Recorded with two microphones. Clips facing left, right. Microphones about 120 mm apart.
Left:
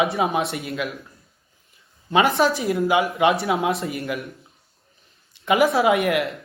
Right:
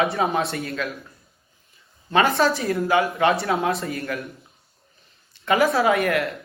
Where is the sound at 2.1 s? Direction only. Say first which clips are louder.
Left 1 dB; 20° left (ahead or behind).